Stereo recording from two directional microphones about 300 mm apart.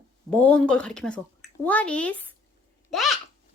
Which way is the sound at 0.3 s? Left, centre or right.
Centre.